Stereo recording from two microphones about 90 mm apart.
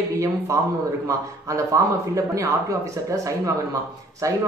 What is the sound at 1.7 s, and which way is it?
Speech, 35° right (ahead or behind).